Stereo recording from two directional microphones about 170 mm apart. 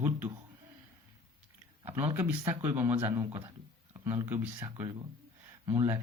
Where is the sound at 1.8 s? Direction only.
15° right (ahead or behind).